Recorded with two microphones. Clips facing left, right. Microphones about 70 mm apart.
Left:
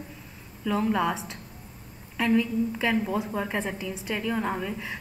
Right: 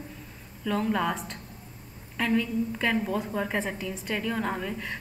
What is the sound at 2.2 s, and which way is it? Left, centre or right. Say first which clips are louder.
A woman's voice: left 2 dB; centre.